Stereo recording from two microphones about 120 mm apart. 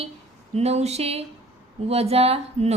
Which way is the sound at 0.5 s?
65° right (ahead or behind).